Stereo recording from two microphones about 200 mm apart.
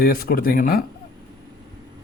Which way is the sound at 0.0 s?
50° left (ahead or behind).